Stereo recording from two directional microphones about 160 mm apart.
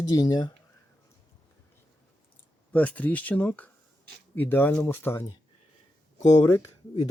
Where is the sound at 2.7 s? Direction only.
10° left (ahead or behind).